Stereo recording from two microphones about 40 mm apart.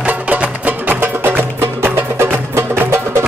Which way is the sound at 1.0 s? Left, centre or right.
Right.